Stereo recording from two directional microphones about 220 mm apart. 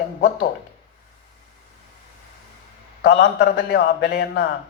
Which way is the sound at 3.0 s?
45° left (ahead or behind).